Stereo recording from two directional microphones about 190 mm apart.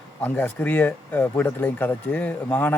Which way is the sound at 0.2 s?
10° left (ahead or behind).